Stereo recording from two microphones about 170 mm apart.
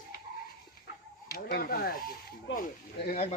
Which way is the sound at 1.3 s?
65° left (ahead or behind).